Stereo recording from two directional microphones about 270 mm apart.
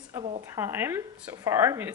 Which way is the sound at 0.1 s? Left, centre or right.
Centre.